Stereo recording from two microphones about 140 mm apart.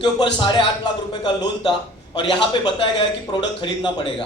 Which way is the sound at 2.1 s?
35° left (ahead or behind).